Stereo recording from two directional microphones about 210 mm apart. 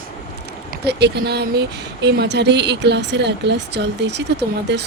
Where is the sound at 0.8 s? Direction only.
50° right (ahead or behind).